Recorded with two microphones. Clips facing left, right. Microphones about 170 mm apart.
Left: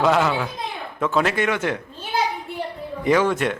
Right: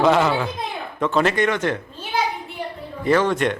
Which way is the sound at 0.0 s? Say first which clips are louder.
Right 2 dB; centre (ahead or behind).